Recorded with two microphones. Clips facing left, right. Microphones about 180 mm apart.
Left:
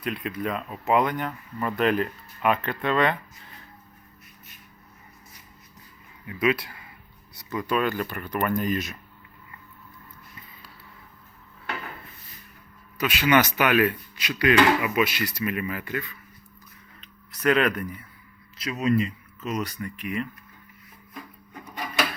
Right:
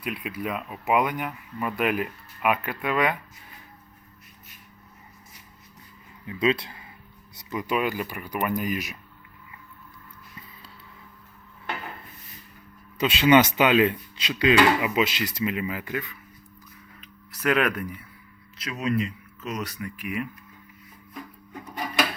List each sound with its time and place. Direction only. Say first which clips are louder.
0.0 s speech: left 2 dB; 5° right (ahead or behind)
6.2 s speech: even; 25° right (ahead or behind)
13.0 s speech: right 3 dB; 25° right (ahead or behind)
17.0 s a sound: left 2 dB; 5° right (ahead or behind)
18.5 s speech: left 3 dB; centre (ahead or behind)